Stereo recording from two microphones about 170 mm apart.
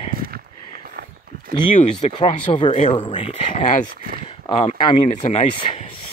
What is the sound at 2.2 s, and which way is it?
Speech, 30° left (ahead or behind).